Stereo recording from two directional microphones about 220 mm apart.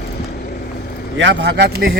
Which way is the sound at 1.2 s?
50° right (ahead or behind).